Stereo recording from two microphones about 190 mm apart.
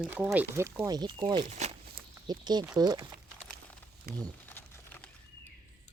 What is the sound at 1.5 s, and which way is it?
Speech, 35° right (ahead or behind).